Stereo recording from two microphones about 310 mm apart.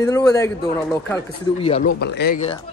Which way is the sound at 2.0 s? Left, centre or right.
Left.